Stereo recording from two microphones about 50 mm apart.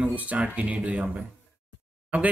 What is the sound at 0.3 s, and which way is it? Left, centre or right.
Speech, right.